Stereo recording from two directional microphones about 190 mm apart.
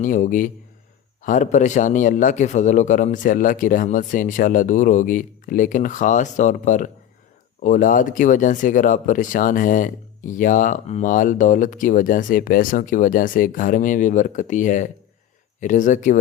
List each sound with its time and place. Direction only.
0.0 s speech: 45° left (ahead or behind)